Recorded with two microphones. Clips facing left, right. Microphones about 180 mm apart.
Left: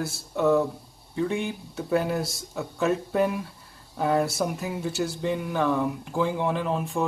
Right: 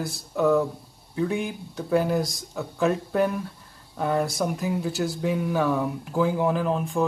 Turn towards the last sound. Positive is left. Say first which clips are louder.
# right 2 dB
turn(degrees=0)  # may be behind; listen again after turning